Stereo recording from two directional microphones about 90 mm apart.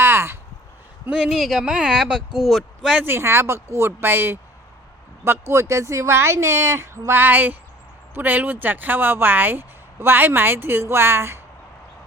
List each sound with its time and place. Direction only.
0.0 s a sound: 25° right (ahead or behind)
1.1 s speech: centre (ahead or behind)
3.0 s speech: 25° right (ahead or behind)